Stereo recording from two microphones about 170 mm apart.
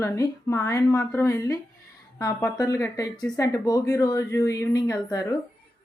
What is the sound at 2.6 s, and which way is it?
Speech, 20° left (ahead or behind).